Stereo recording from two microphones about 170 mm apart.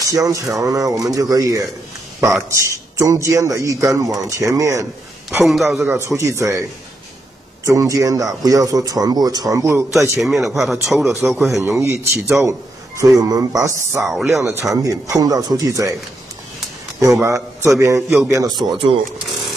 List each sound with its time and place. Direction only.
0.0 s a man's voice: 20° right (ahead or behind)
2.6 s a man's voice: 15° right (ahead or behind)
5.4 s speech: centre (ahead or behind); by 6.6 s 15° right (ahead or behind)
7.6 s a man's voice: 20° right (ahead or behind)
10.2 s speech: centre (ahead or behind)
11.6 s a man's voice: 15° right (ahead or behind)
13.9 s speech: centre (ahead or behind)
14.4 s a man's voice: 20° right (ahead or behind)
17.0 s a man's voice: 20° right (ahead or behind)